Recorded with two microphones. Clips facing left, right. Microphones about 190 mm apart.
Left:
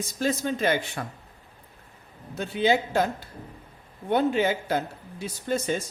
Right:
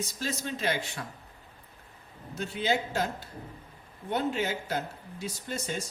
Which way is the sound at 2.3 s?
55° left (ahead or behind).